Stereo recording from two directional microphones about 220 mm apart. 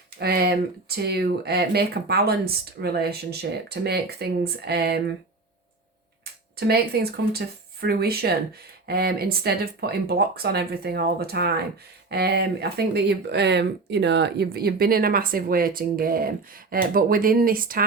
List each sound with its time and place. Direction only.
0.2 s speech: 45° right (ahead or behind)
6.7 s speech: 45° right (ahead or behind)